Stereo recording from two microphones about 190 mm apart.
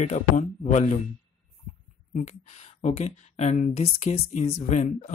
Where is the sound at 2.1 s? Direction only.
35° left (ahead or behind).